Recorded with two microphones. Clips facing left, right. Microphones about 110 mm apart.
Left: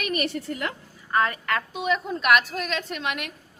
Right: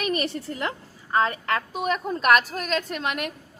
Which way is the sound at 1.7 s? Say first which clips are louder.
Even; 45° right (ahead or behind).